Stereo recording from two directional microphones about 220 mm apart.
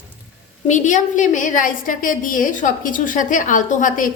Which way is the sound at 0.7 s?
35° left (ahead or behind).